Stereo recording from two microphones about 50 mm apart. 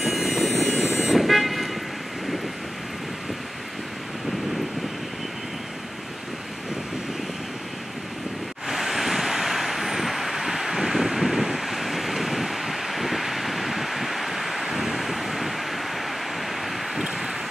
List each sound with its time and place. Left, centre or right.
0.0 s vehicle: centre
0.7 s vehicle: centre
1.1 s vehicle: centre
8.6 s vehicle: centre